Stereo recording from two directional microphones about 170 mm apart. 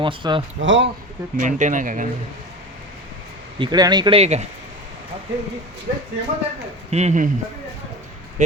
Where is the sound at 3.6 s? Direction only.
25° right (ahead or behind).